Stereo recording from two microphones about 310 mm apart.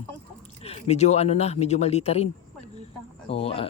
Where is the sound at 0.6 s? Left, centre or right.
Centre.